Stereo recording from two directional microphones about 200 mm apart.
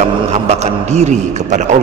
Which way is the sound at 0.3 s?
35° right (ahead or behind).